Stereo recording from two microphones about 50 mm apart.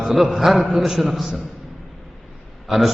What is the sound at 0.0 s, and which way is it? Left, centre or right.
A man's voice, centre.